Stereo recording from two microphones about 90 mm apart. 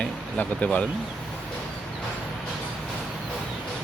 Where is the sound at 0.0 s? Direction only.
15° left (ahead or behind).